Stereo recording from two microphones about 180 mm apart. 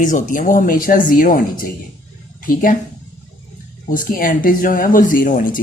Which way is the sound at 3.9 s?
50° left (ahead or behind).